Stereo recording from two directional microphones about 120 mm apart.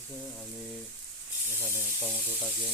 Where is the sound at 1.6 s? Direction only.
20° left (ahead or behind).